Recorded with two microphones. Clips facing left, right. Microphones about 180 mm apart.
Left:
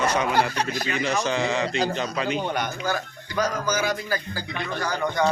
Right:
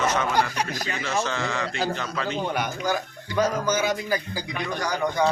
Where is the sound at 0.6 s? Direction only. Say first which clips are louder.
Left 1 dB; 10° right (ahead or behind).